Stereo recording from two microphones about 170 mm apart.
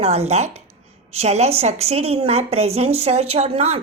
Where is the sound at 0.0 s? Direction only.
40° right (ahead or behind).